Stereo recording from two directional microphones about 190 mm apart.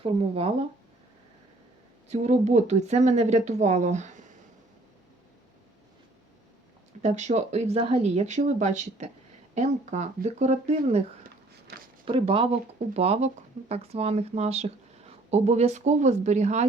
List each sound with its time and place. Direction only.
0.0 s speech: 30° right (ahead or behind)
2.0 s speech: 35° right (ahead or behind)
7.0 s speech: 40° right (ahead or behind)
11.7 s speech: 55° right (ahead or behind)
12.0 s speech: 30° right (ahead or behind)